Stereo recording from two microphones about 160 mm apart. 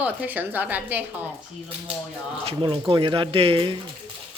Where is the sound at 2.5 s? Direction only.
30° right (ahead or behind).